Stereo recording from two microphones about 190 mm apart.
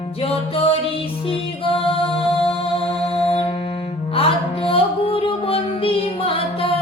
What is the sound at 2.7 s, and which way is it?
Music, 30° left (ahead or behind).